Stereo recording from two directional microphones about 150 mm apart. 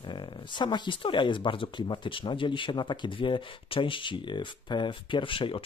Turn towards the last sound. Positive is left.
turn(degrees=35)  # may be behind; listen again after turning